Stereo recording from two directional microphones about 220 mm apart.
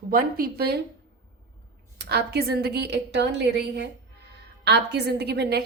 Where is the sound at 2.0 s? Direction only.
45° right (ahead or behind).